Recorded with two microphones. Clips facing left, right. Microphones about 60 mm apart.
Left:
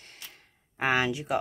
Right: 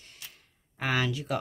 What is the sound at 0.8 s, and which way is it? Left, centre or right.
Speech, left.